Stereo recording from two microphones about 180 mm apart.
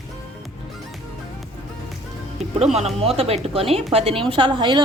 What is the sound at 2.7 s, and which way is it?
A woman's voice, 35° right (ahead or behind).